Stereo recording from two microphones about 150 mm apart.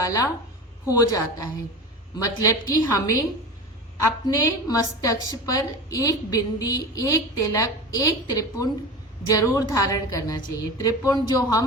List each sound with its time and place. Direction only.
0.0 s a woman's voice: 25° left (ahead or behind)
4.3 s a woman's voice: 25° left (ahead or behind)